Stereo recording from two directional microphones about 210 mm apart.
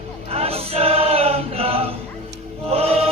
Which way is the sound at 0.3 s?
30° right (ahead or behind).